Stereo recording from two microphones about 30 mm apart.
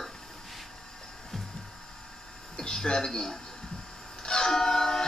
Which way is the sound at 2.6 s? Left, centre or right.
Left.